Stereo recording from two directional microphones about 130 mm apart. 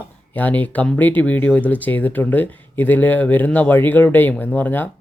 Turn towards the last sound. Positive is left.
turn(degrees=15)  # may be behind; listen again after turning